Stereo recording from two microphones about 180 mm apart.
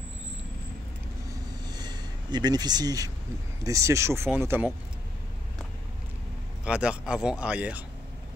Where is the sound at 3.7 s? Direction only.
15° right (ahead or behind).